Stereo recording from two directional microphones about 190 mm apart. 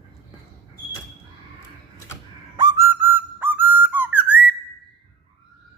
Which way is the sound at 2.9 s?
10° right (ahead or behind).